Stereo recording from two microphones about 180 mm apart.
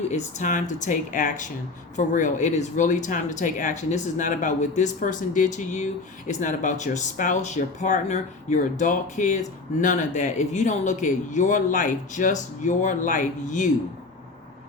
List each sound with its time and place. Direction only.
0.1 s speech: 45° left (ahead or behind)